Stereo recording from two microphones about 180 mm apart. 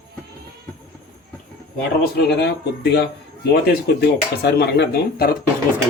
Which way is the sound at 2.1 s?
65° left (ahead or behind).